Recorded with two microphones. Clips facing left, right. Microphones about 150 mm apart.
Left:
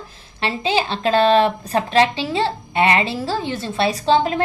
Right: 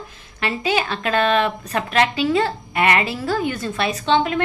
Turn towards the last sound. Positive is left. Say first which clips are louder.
# left 2 dB
turn(degrees=35)  # may be behind; listen again after turning